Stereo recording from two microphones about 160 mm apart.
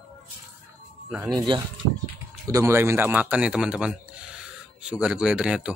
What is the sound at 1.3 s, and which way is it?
A man's voice, 30° right (ahead or behind).